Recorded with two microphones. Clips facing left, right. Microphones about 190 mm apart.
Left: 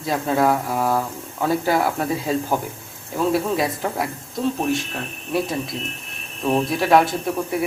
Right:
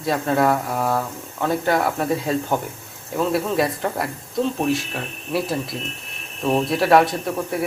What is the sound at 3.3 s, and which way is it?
Speech, centre (ahead or behind).